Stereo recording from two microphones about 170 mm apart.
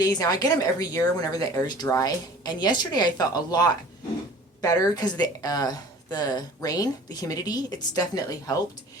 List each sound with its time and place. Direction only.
0.0 s speech: 20° left (ahead or behind)